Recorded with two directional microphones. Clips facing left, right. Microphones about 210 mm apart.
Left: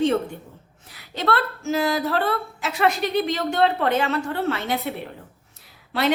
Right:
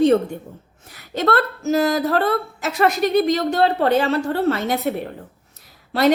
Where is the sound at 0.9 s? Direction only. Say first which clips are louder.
Right 4 dB; 45° right (ahead or behind).